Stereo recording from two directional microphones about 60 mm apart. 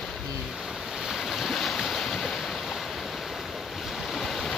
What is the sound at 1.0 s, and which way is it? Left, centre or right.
Boat, centre.